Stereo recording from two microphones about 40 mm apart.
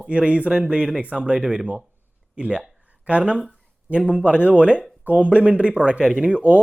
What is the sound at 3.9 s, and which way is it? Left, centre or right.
Speech, right.